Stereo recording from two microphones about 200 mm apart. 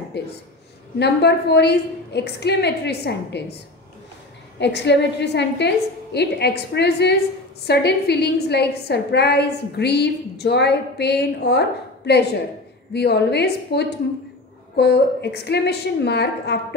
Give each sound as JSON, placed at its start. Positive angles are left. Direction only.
{"t": 0.2, "sound": "a woman's voice", "side_deg": 55}
{"t": 4.6, "sound": "a woman's voice", "side_deg": 60}